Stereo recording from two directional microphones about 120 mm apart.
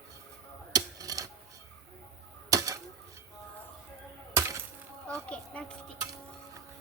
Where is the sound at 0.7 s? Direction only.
30° right (ahead or behind).